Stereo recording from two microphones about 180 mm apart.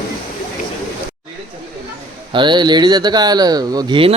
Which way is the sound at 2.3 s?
25° right (ahead or behind).